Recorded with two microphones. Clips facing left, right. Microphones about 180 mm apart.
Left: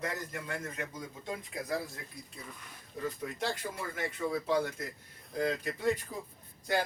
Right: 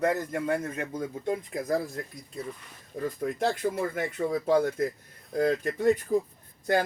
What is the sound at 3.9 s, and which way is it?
Speech, 45° right (ahead or behind).